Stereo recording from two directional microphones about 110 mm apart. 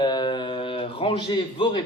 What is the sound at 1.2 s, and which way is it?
Speech, 45° left (ahead or behind).